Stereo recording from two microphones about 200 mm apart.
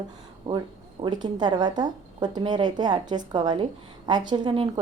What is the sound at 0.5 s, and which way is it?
A woman's voice, 20° right (ahead or behind).